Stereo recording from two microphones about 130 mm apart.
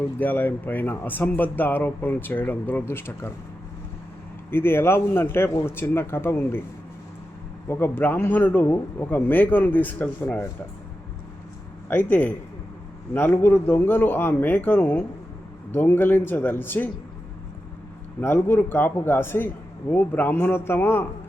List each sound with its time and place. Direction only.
0.2 s speech: 15° left (ahead or behind)
4.5 s speech: 15° left (ahead or behind)
7.7 s speech: 15° left (ahead or behind)
11.9 s speech: 15° left (ahead or behind)
18.2 s speech: 15° left (ahead or behind)